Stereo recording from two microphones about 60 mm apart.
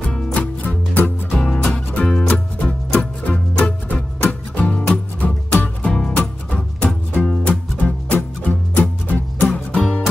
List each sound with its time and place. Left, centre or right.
0.1 s music: centre
0.4 s music: left
1.3 s music: centre
3.0 s music: left